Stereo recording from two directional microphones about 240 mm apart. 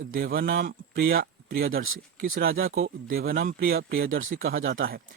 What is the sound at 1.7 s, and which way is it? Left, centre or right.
Speech, right.